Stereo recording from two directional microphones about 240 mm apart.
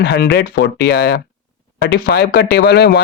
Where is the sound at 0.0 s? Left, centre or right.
Left.